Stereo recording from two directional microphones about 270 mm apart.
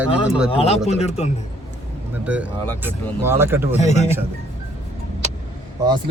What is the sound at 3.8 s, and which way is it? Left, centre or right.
Speech, left.